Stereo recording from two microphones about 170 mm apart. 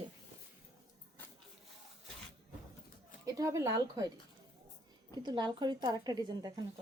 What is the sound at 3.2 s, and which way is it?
Speech, 20° right (ahead or behind).